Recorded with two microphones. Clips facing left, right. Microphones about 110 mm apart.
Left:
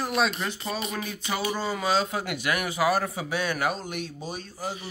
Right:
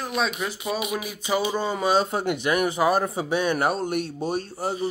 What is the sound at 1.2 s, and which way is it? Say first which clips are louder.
A man's voice: right 5 dB; 20° right (ahead or behind).